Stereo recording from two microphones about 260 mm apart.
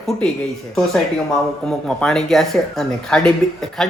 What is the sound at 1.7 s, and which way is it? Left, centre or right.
Speech, centre.